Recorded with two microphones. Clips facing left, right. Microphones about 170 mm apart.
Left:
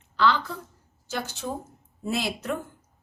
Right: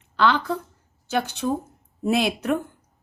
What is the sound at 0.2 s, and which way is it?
A woman's voice, 60° right (ahead or behind).